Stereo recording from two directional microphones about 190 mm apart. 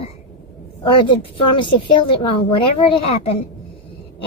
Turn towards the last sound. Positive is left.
turn(degrees=30)  # may be behind; listen again after turning